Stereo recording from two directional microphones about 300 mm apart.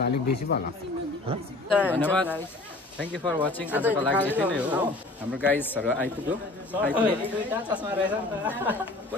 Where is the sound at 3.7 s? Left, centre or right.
Centre.